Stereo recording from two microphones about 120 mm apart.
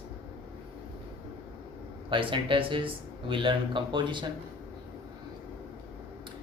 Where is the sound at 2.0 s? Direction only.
45° right (ahead or behind).